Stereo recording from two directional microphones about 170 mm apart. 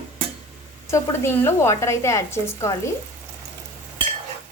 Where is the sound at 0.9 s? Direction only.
15° left (ahead or behind).